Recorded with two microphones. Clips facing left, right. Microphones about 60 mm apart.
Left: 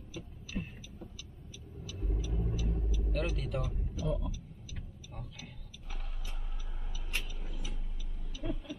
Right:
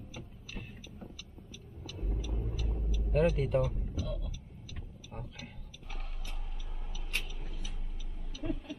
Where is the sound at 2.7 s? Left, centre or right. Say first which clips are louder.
Right 4 dB; centre.